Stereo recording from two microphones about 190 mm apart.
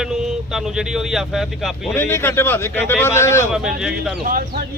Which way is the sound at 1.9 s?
15° left (ahead or behind).